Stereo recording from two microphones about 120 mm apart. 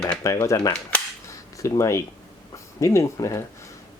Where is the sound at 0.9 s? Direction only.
10° left (ahead or behind).